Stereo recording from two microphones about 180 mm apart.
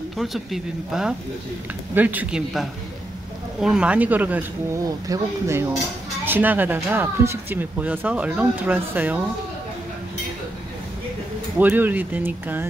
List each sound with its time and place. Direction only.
0.2 s speech: centre (ahead or behind)
11.5 s speech: 10° right (ahead or behind)